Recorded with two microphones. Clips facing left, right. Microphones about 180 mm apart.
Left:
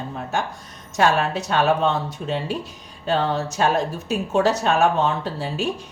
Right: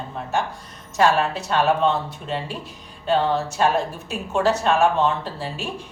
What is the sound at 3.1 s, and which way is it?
A woman's voice, 40° left (ahead or behind).